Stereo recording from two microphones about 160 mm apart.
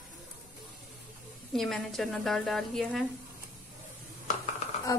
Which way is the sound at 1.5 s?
Centre (ahead or behind).